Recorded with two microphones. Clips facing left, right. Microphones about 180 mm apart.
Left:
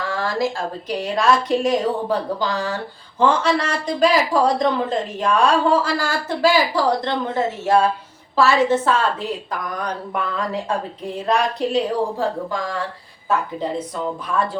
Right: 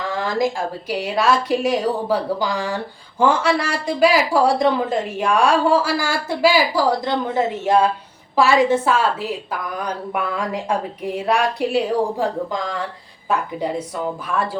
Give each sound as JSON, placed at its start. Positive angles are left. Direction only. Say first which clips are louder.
{"t": 0.1, "sound": "a sound", "louder": "right 2 dB", "side_deg": -15}
{"t": 0.9, "sound": "speech", "louder": "left 1 dB", "side_deg": -5}
{"t": 7.6, "sound": "speech", "louder": "left 1 dB", "side_deg": -20}
{"t": 13.6, "sound": "speech", "louder": "right 1 dB", "side_deg": -10}